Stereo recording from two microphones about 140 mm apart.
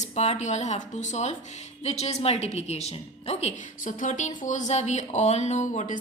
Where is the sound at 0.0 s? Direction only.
50° left (ahead or behind).